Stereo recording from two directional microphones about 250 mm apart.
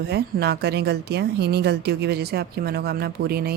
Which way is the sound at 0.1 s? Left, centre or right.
Right.